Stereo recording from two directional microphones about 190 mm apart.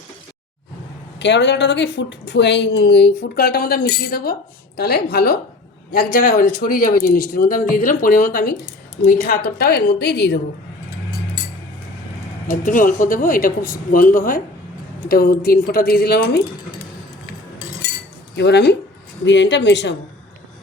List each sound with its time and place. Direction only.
1.2 s a woman's voice: 65° left (ahead or behind)
12.5 s speech: 45° left (ahead or behind)
18.3 s a woman's voice: 60° left (ahead or behind)